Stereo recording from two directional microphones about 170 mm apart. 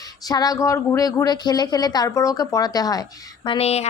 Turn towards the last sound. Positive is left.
turn(degrees=40)  # may be behind; listen again after turning